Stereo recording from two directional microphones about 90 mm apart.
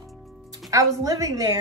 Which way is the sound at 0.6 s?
40° right (ahead or behind).